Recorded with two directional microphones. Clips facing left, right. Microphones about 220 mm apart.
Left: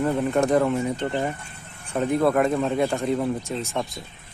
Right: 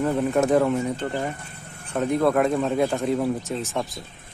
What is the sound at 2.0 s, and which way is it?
Speech, centre (ahead or behind).